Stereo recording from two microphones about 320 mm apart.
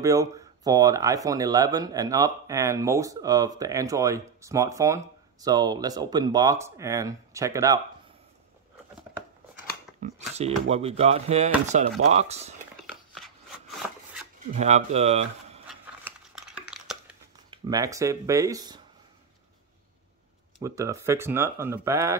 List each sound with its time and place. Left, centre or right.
0.0 s speech: centre
9.9 s speech: right
12.8 s a sound: centre
14.5 s speech: right
15.7 s a sound: centre
17.5 s speech: centre
20.5 s speech: centre